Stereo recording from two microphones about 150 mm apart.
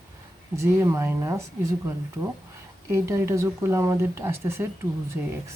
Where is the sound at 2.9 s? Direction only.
20° right (ahead or behind).